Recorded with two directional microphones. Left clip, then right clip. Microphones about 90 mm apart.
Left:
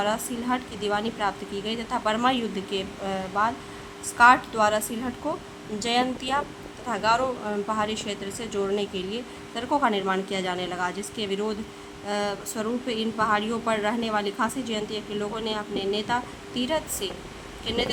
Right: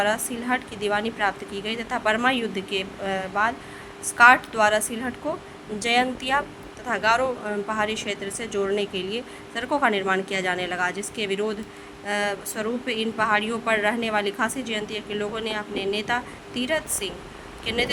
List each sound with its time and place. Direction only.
0.0 s a woman's voice: 45° right (ahead or behind)